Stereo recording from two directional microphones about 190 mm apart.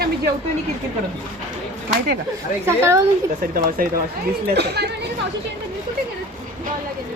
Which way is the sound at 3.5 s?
50° right (ahead or behind).